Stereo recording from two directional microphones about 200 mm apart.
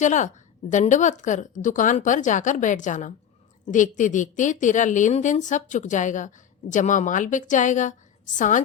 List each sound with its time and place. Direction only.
0.0 s a woman's voice: 35° left (ahead or behind)